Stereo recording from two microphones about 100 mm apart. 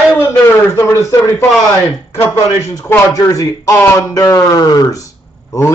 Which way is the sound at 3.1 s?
35° left (ahead or behind).